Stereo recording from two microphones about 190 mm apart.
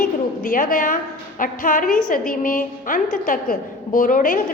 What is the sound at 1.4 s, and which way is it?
A woman's voice, 45° left (ahead or behind).